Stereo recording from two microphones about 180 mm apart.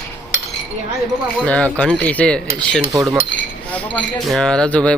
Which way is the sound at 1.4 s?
5° left (ahead or behind).